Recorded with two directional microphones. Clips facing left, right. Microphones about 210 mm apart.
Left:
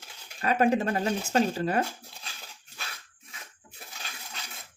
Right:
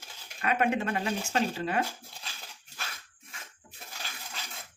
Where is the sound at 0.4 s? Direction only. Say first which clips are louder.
Left 4 dB; 35° left (ahead or behind).